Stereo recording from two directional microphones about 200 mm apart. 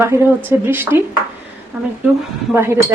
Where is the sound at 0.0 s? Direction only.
10° right (ahead or behind).